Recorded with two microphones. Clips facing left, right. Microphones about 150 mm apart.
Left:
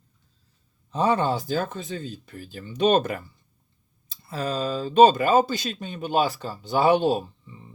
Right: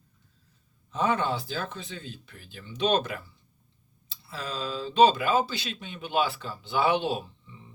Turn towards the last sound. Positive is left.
turn(degrees=40)  # may be behind; listen again after turning